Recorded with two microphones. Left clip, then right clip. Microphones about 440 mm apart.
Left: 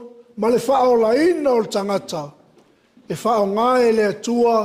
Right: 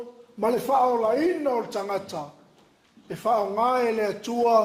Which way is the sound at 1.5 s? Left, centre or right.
Left.